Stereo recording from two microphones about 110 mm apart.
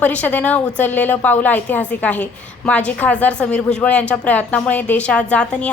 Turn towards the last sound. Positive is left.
turn(degrees=10)  # may be behind; listen again after turning